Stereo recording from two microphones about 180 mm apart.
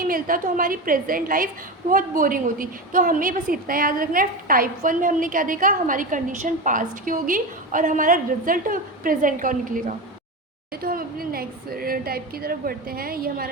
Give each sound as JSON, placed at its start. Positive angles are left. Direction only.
{"t": 0.0, "sound": "a woman's voice", "side_deg": -50}